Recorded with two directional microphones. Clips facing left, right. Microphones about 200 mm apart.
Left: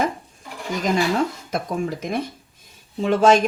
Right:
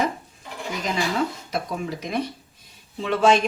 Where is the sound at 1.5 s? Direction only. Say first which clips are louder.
Left 3 dB; 50° left (ahead or behind).